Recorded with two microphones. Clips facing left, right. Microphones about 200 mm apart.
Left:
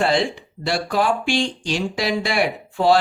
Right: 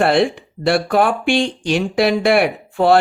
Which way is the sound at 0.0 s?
60° right (ahead or behind).